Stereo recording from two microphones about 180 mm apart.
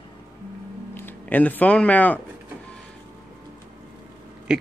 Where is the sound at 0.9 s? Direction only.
10° left (ahead or behind).